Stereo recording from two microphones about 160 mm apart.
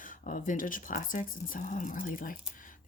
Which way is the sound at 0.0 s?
60° left (ahead or behind).